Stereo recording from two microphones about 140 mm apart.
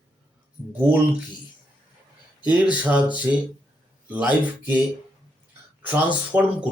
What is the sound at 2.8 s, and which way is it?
Speech, 10° right (ahead or behind).